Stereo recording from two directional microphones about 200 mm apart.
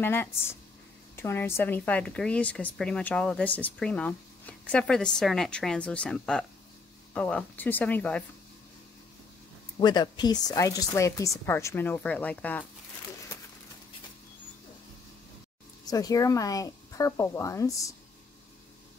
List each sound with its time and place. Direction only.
0.0 s a woman's voice: 10° left (ahead or behind)
9.8 s speech: 20° left (ahead or behind)
15.9 s speech: 20° left (ahead or behind)